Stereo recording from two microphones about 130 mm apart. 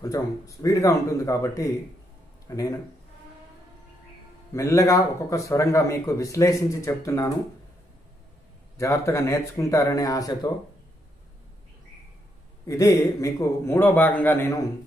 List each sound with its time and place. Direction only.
0.0 s a man's voice: 25° left (ahead or behind)
4.6 s a man's voice: 25° left (ahead or behind)
8.7 s a man's voice: 20° left (ahead or behind)
12.6 s a man's voice: 20° left (ahead or behind)